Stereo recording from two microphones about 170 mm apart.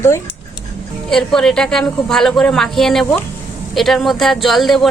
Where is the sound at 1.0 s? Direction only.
5° left (ahead or behind).